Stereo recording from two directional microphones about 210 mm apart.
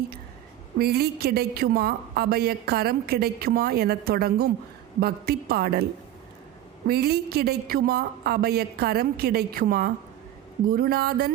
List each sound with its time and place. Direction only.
0.8 s a woman's voice: 50° right (ahead or behind)